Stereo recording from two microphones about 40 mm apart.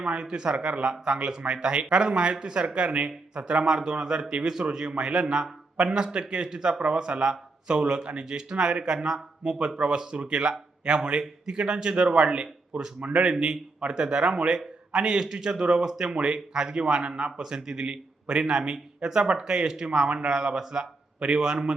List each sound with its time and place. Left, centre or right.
0.0 s a man's voice: right
13.3 s a man's voice: right